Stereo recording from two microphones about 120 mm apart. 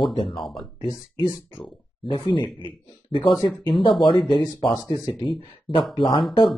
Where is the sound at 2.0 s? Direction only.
45° left (ahead or behind).